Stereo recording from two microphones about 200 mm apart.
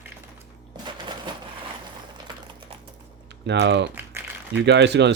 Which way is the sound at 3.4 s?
60° right (ahead or behind).